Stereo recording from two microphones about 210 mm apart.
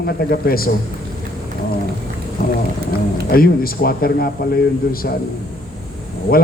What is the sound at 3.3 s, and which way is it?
A man's voice, 45° left (ahead or behind).